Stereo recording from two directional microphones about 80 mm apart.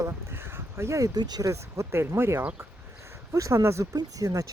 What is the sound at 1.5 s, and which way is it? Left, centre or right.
Speech, right.